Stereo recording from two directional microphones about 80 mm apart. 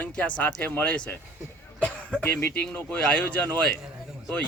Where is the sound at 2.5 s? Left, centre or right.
Left.